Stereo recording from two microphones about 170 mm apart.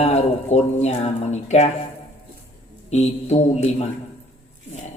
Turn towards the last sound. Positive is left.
turn(degrees=40)  # may be behind; listen again after turning